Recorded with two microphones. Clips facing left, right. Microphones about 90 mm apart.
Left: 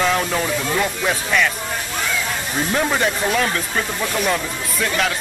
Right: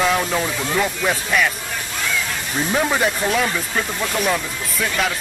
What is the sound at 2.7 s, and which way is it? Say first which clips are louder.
Speech: right 1 dB; 5° right (ahead or behind).